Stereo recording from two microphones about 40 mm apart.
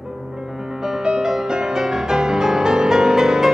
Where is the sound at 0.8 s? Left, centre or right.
Centre.